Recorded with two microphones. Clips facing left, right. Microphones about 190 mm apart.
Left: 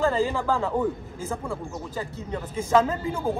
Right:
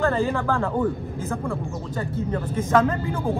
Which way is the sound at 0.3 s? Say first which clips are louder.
Right 1 dB; 10° left (ahead or behind).